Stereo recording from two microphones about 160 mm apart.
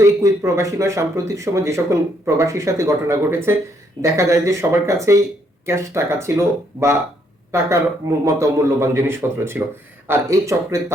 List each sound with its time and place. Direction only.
0.0 s a man's voice: 20° right (ahead or behind)
8.2 s a man's voice: 20° right (ahead or behind)